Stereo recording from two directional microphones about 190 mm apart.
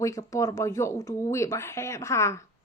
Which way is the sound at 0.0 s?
15° left (ahead or behind).